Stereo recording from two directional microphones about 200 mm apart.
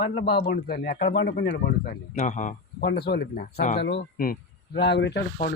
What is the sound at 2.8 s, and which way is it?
Speech, 55° left (ahead or behind).